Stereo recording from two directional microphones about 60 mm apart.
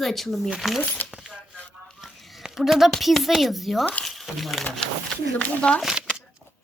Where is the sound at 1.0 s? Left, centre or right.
Left.